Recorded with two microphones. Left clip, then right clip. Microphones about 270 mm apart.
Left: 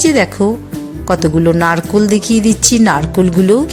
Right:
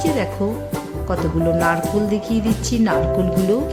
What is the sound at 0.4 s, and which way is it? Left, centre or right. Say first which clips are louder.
Speech: left 8 dB; left.